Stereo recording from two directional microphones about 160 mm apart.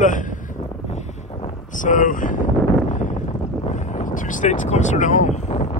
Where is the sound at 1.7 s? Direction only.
55° left (ahead or behind).